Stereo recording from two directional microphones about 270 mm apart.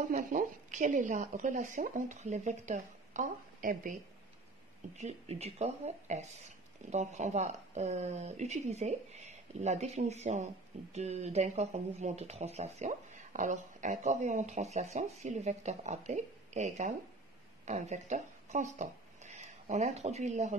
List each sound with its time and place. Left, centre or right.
0.1 s speech: right